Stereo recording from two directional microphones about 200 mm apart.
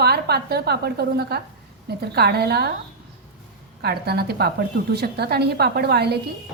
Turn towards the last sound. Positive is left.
turn(degrees=-55)  # may be behind; listen again after turning